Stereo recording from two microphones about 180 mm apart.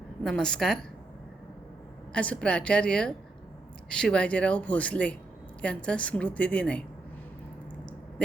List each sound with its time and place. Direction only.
0.2 s a woman's voice: 5° left (ahead or behind)
2.1 s a woman's voice: 5° left (ahead or behind)